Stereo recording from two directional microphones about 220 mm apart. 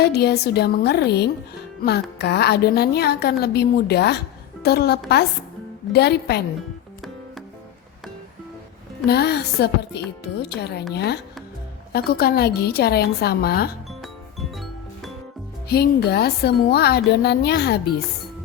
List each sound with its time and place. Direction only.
0.0 s a woman's voice: 45° left (ahead or behind)
9.0 s a woman's voice: 45° left (ahead or behind)
14.0 s music: centre (ahead or behind)
15.7 s a woman's voice: 45° left (ahead or behind)